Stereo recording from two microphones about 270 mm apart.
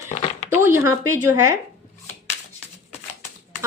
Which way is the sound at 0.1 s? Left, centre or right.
Left.